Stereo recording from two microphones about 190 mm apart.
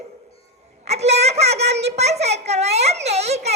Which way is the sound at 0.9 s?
35° right (ahead or behind).